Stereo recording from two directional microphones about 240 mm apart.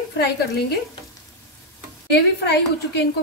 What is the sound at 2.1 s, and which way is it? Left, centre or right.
Speech, left.